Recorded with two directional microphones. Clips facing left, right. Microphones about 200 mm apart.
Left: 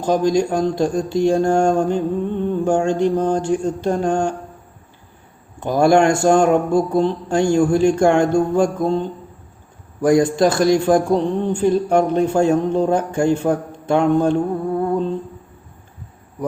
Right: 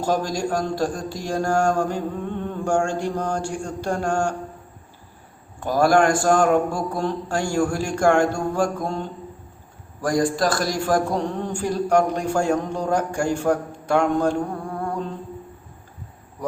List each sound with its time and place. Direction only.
0.0 s a man's voice: 20° left (ahead or behind)
5.5 s a man's voice: 20° left (ahead or behind)
10.2 s a man's voice: 25° left (ahead or behind)